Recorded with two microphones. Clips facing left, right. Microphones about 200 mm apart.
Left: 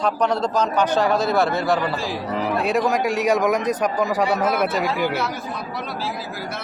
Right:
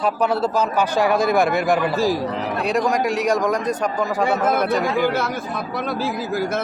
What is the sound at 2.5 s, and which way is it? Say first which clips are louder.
A man's voice: even; centre (ahead or behind).